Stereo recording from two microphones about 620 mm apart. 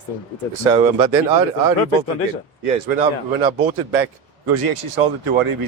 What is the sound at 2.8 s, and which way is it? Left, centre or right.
A man's voice, right.